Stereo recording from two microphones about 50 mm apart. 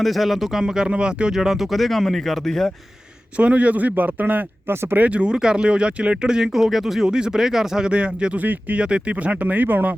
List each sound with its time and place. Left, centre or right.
0.0 s speech: centre
0.6 s speech: centre
1.3 s speech: centre
3.3 s a man's voice: right
4.7 s speech: right
4.9 s speech: right
8.4 s speech: right